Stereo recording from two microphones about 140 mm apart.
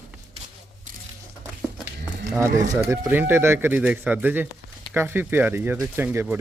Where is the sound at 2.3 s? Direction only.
20° right (ahead or behind).